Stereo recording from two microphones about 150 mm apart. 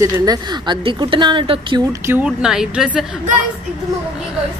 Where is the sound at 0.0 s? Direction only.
25° right (ahead or behind).